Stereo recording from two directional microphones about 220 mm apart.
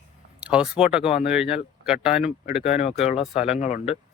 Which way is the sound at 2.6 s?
30° left (ahead or behind).